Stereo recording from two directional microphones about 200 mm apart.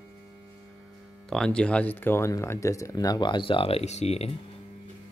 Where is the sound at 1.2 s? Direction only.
5° left (ahead or behind); by 4.3 s 30° left (ahead or behind).